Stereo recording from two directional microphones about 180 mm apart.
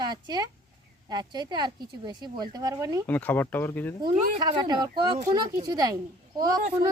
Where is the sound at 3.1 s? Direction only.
10° left (ahead or behind).